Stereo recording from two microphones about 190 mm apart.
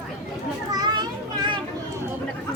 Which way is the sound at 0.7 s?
20° right (ahead or behind).